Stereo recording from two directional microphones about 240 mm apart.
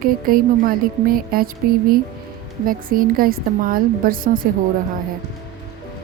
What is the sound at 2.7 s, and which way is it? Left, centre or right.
A woman's voice, right.